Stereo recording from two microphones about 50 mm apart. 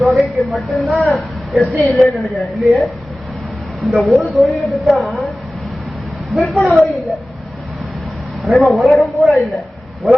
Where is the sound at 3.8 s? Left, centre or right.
Centre.